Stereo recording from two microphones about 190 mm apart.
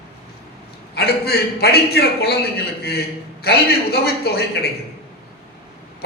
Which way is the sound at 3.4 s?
55° left (ahead or behind).